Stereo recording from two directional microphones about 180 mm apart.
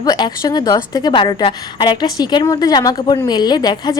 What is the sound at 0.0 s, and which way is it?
A woman's voice, 20° left (ahead or behind).